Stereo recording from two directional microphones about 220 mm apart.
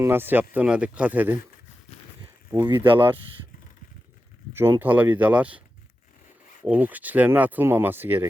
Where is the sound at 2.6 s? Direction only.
20° right (ahead or behind).